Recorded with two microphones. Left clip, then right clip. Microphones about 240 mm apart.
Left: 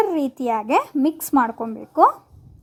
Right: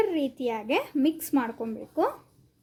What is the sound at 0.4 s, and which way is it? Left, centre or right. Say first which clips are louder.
Speech: left 11 dB; left.